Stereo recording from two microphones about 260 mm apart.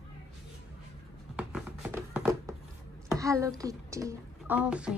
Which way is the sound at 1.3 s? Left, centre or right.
Centre.